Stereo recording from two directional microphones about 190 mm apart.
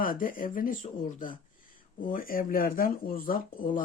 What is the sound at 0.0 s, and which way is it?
Speech, 45° left (ahead or behind).